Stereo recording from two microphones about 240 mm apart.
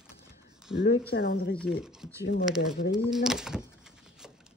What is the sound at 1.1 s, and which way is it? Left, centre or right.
Speech, left.